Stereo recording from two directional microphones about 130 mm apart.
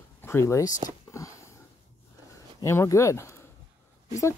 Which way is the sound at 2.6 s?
20° left (ahead or behind).